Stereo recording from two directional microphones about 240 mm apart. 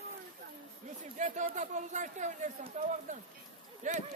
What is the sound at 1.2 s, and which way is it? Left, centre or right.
Speech, right.